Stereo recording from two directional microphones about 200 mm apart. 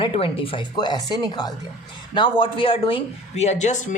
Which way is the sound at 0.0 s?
25° left (ahead or behind).